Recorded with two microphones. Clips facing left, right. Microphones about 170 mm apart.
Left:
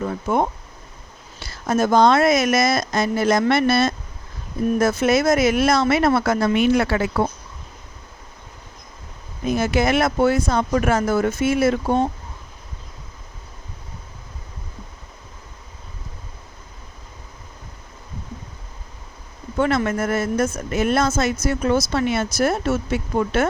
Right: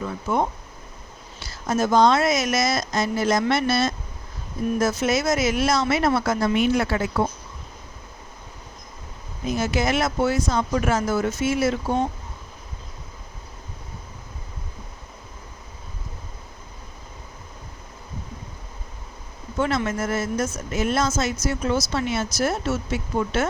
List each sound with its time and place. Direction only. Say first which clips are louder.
0.0 s speech: left 3 dB; 50° left (ahead or behind)
1.5 s speech: left 3 dB; 60° left (ahead or behind)
9.5 s speech: left 4 dB; 60° left (ahead or behind)
19.5 s speech: left 4 dB; 60° left (ahead or behind)